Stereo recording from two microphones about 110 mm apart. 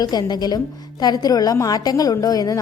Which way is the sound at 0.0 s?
40° left (ahead or behind).